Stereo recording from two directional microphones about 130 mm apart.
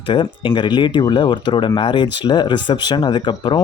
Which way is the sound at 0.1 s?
35° left (ahead or behind).